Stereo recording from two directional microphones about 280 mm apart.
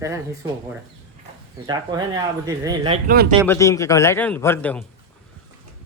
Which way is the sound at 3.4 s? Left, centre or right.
Centre.